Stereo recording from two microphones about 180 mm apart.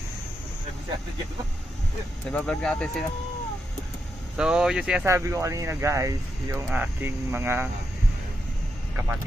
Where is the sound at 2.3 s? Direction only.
5° left (ahead or behind).